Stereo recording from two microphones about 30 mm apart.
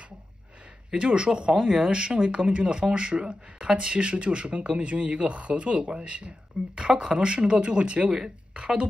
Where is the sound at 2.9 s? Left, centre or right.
Right.